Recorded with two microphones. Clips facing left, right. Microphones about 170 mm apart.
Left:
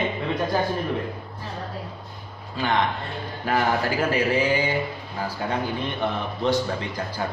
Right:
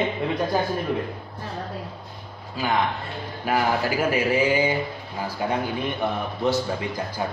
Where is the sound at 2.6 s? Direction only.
10° right (ahead or behind).